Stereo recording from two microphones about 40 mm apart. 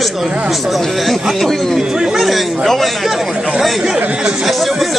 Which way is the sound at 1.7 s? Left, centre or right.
Centre.